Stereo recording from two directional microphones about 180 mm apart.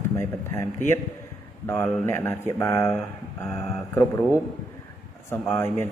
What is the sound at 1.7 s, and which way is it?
A man's voice, 15° left (ahead or behind).